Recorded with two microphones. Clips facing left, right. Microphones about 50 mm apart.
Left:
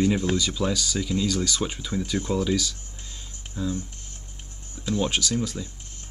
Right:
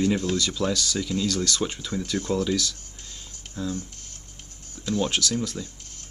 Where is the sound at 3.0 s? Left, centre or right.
Left.